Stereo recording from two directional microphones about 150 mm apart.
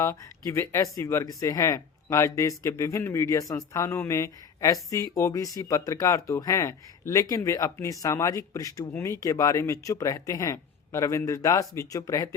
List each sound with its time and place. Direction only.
0.0 s speech: 20° left (ahead or behind)